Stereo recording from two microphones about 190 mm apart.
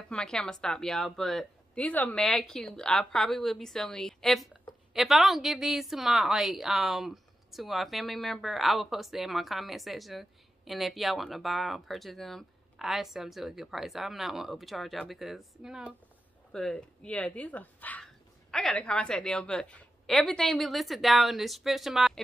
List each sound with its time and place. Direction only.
0.1 s a woman's voice: 5° left (ahead or behind)